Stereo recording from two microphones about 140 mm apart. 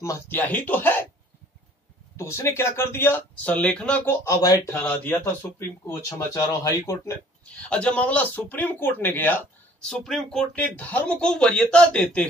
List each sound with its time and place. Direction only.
0.0 s speech: 20° left (ahead or behind)
0.4 s speech: 10° left (ahead or behind)
2.1 s speech: 20° left (ahead or behind)
4.7 s speech: 10° left (ahead or behind)
7.7 s speech: 10° left (ahead or behind)